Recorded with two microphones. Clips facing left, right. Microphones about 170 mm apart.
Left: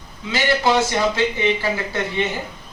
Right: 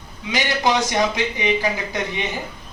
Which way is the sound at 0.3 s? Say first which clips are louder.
Left 2 dB; 15° right (ahead or behind).